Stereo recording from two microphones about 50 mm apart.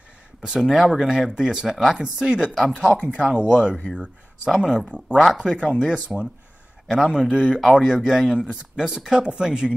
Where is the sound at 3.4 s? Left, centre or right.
Right.